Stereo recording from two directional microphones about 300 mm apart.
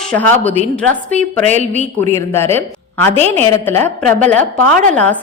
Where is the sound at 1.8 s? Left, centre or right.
Centre.